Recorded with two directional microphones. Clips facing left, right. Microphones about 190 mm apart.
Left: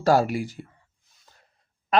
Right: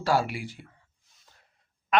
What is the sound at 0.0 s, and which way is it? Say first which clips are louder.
Speech: left 6 dB; 40° left (ahead or behind).